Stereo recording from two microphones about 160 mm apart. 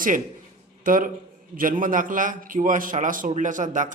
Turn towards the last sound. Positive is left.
turn(degrees=-50)  # may be behind; listen again after turning